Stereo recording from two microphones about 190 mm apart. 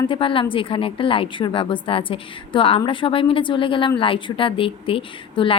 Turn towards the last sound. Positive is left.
turn(degrees=30)  # may be behind; listen again after turning